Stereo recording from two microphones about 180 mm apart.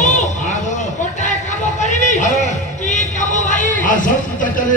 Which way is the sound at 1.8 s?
40° left (ahead or behind).